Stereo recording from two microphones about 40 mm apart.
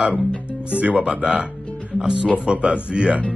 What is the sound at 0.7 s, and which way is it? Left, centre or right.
Speech, right.